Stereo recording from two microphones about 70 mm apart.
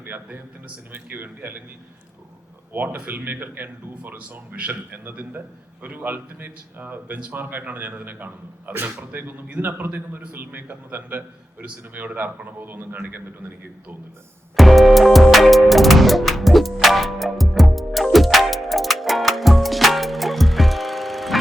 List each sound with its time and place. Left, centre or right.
0.0 s speech: right
2.7 s speech: right
14.5 s music: centre